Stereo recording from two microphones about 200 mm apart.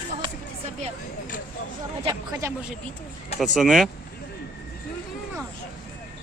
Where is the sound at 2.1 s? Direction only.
15° right (ahead or behind).